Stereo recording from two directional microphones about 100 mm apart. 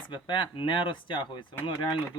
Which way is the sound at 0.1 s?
55° left (ahead or behind).